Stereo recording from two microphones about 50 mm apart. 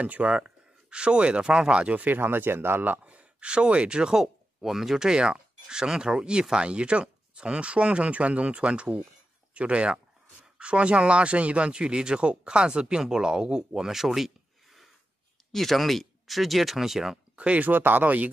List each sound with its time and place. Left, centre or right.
0.0 s speech: right
2.0 s speech: right
3.0 s speech: right; by 17.2 s centre
17.4 s speech: right
17.6 s speech: right